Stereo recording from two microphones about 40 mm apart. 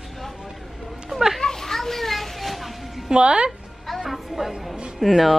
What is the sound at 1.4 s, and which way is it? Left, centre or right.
Children playing, centre.